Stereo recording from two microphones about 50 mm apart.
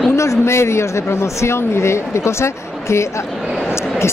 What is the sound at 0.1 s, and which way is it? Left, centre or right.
A woman's voice, left.